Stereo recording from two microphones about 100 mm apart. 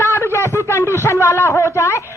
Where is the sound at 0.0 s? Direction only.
25° left (ahead or behind).